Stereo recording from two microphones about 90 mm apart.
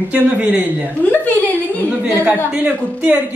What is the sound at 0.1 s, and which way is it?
Speech, 15° right (ahead or behind).